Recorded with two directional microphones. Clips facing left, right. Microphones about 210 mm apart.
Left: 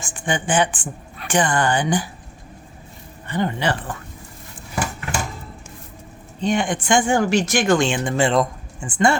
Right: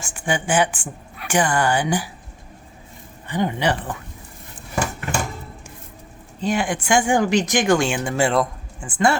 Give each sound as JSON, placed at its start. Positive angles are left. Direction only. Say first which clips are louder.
{"t": 0.0, "sound": "speech", "louder": "even", "side_deg": -10}
{"t": 3.2, "sound": "speech", "louder": "right 1 dB", "side_deg": -15}
{"t": 6.4, "sound": "speech", "louder": "left 1 dB", "side_deg": -5}